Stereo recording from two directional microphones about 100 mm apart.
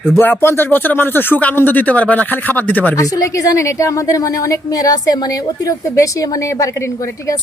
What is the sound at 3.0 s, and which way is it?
A woman's voice, 35° left (ahead or behind).